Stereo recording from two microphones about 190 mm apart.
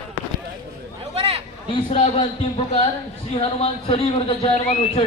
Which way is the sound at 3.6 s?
30° left (ahead or behind).